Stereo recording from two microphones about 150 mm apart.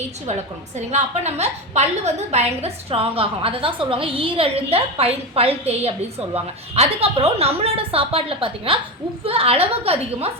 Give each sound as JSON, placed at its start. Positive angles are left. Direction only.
{"t": 0.9, "sound": "a woman's voice", "side_deg": -45}